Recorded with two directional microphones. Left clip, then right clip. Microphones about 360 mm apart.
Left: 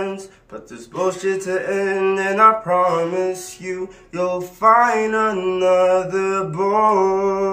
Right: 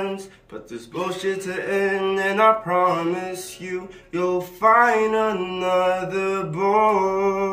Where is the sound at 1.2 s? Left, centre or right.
Centre.